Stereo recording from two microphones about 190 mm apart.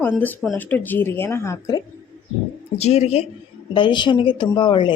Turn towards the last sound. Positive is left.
turn(degrees=25)  # may be behind; listen again after turning